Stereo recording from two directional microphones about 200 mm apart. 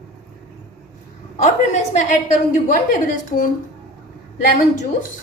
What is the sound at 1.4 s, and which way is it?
A woman's voice, 35° left (ahead or behind).